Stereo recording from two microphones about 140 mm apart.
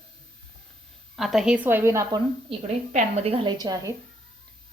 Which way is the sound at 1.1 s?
Centre (ahead or behind).